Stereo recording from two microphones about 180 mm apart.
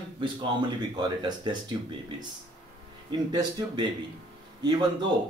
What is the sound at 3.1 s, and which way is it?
Speech, 20° right (ahead or behind).